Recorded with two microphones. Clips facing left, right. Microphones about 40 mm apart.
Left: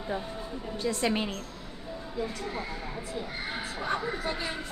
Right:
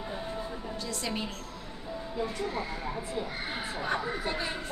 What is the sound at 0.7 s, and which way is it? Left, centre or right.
Speech, left.